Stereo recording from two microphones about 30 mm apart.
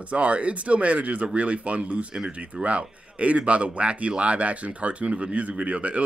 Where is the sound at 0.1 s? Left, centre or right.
Right.